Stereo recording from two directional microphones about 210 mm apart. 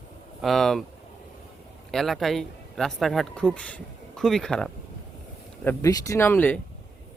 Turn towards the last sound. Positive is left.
turn(degrees=10)  # may be behind; listen again after turning